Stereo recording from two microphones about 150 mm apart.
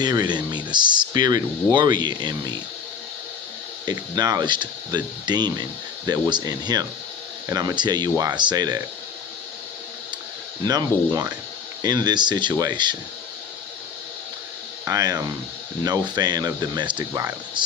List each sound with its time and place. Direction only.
0.0 s speech: 25° right (ahead or behind)
3.8 s speech: 25° right (ahead or behind)
10.6 s speech: 25° right (ahead or behind)
14.8 s speech: 25° right (ahead or behind)